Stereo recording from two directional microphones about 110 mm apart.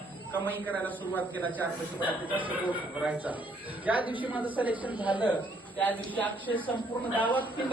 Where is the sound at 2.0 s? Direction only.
15° right (ahead or behind).